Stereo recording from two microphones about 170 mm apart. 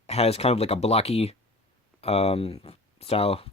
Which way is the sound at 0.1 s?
35° left (ahead or behind).